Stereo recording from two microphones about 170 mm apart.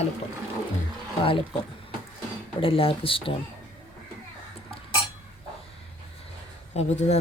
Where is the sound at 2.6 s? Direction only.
35° left (ahead or behind).